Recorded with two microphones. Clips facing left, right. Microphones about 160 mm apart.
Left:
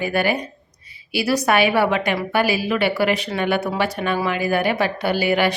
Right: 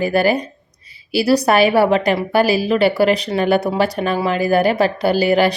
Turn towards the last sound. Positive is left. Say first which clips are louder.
# right 5 dB
turn(degrees=-40)  # may be behind; listen again after turning